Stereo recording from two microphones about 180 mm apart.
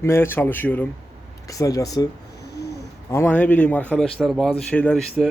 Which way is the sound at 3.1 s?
10° left (ahead or behind).